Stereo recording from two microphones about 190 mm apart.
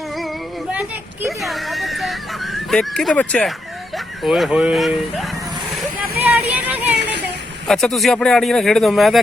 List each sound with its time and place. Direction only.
0.7 s speech: 5° right (ahead or behind)
6.2 s music: 10° right (ahead or behind)
7.7 s speech: centre (ahead or behind)